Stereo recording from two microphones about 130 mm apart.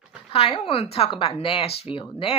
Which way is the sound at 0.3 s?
45° left (ahead or behind).